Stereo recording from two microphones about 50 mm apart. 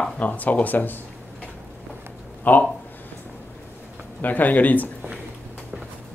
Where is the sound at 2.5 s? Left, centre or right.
Left.